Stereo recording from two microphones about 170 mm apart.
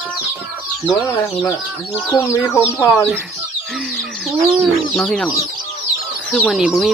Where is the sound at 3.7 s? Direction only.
Centre (ahead or behind).